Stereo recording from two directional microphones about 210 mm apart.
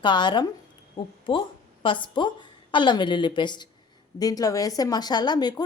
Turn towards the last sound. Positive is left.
turn(degrees=20)  # may be behind; listen again after turning